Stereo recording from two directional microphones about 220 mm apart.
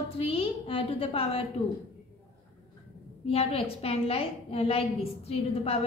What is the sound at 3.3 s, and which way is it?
A woman's voice, 25° left (ahead or behind).